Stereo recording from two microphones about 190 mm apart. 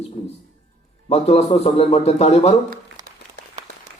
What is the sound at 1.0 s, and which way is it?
A man's voice, 35° left (ahead or behind).